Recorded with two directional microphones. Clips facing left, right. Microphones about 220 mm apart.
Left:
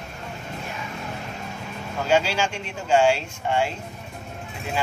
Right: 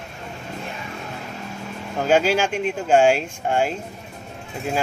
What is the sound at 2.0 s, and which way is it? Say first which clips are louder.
Speech: right 4 dB; 50° right (ahead or behind).